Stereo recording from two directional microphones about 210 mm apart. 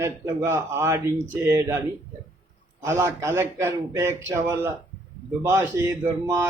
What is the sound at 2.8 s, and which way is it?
A man's voice, 10° right (ahead or behind).